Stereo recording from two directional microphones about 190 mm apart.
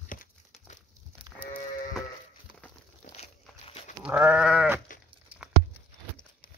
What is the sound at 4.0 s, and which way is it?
Goat, 5° right (ahead or behind).